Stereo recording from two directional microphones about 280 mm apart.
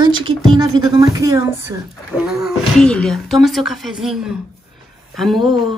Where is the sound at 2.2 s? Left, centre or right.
Centre.